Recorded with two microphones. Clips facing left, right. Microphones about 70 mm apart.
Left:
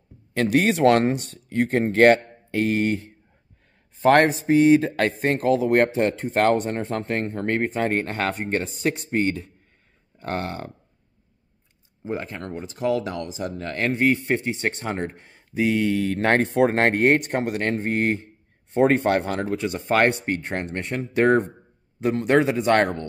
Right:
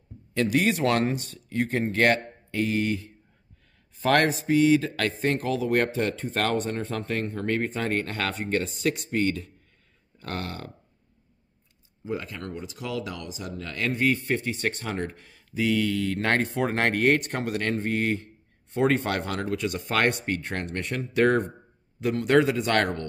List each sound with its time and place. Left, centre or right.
0.3 s speech: left
4.0 s speech: left
7.5 s speech: left
12.0 s speech: left
13.8 s speech: left